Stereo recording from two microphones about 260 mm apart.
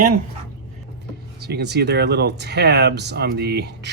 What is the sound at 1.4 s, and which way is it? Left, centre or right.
Speech, right.